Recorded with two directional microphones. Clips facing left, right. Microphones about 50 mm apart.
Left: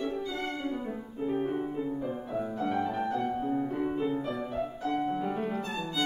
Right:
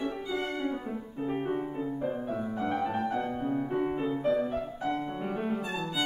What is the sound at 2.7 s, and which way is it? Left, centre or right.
Music, right.